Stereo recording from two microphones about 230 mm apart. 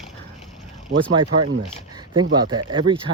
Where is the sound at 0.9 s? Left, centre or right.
Right.